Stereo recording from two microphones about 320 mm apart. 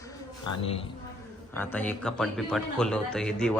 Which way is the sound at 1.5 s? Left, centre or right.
Centre.